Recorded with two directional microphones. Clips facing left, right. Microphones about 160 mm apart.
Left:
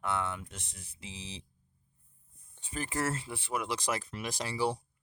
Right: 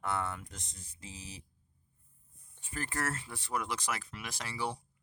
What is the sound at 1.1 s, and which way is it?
Speech, 15° left (ahead or behind).